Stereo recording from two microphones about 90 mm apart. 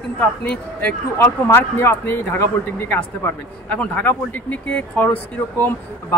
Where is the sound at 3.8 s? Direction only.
15° left (ahead or behind).